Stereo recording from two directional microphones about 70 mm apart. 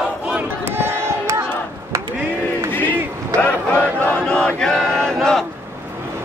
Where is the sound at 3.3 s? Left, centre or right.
Left.